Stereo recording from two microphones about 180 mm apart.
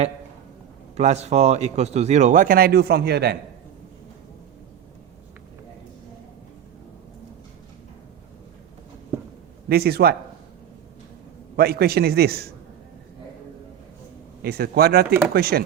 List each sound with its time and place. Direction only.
0.9 s speech: 40° right (ahead or behind); by 3.3 s 65° right (ahead or behind)
9.6 s a man's voice: 60° right (ahead or behind)
11.5 s a man's voice: 60° right (ahead or behind)
14.4 s a man's voice: 60° right (ahead or behind)